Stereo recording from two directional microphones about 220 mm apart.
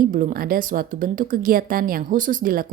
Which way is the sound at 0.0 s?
40° right (ahead or behind).